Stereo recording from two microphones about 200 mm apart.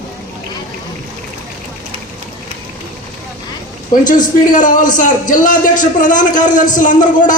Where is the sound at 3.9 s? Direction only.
45° left (ahead or behind).